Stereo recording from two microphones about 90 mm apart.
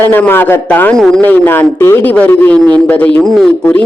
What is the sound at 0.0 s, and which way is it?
Speech, 20° left (ahead or behind).